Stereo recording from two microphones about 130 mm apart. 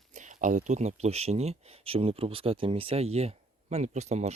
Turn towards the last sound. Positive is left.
turn(degrees=-60)  # may be behind; listen again after turning